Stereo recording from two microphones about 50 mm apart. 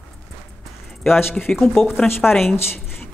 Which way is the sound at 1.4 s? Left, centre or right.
Centre.